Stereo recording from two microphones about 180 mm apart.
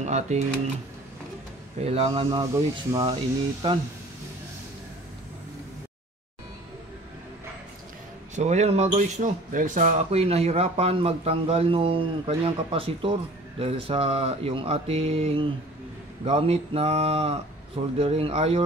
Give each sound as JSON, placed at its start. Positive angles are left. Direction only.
{"t": 0.0, "sound": "speech", "side_deg": -40}
{"t": 1.8, "sound": "speech", "side_deg": -35}
{"t": 8.4, "sound": "speech", "side_deg": -40}